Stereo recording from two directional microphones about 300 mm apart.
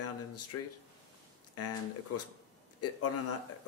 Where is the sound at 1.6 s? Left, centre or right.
Left.